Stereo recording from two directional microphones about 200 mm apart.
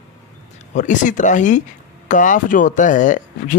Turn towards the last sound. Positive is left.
turn(degrees=40)  # may be behind; listen again after turning